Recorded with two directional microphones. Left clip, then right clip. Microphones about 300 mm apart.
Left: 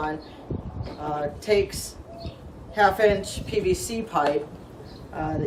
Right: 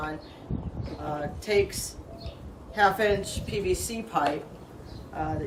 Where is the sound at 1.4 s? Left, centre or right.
Centre.